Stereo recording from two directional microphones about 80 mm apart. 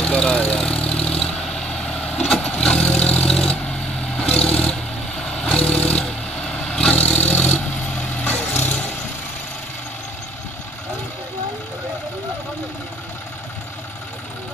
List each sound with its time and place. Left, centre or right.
0.0 s vehicle: centre